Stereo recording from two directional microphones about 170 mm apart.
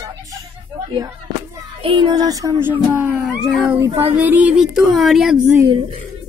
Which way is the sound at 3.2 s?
Centre (ahead or behind).